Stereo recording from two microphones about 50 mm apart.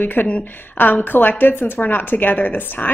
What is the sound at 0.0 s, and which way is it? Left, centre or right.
A woman's voice, left.